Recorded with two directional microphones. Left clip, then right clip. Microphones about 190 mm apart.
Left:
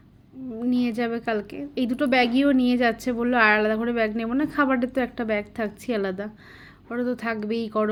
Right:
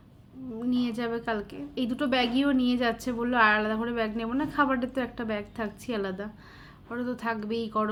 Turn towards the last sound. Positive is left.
turn(degrees=25)  # may be behind; listen again after turning